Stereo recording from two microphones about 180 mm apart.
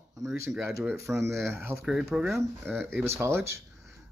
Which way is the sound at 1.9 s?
5° right (ahead or behind).